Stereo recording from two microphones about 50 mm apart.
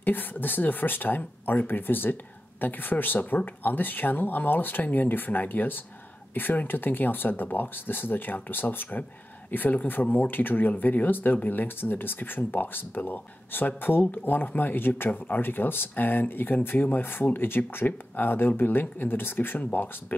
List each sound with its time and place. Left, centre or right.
0.0 s speech: left